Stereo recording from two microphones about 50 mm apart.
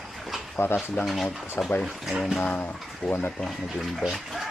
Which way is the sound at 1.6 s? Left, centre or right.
Left.